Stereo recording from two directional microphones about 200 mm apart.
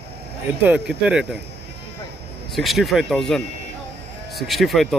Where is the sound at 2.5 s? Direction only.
Centre (ahead or behind).